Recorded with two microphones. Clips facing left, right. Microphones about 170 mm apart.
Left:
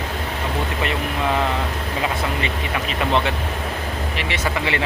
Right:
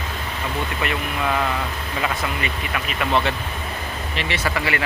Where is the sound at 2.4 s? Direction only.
25° left (ahead or behind).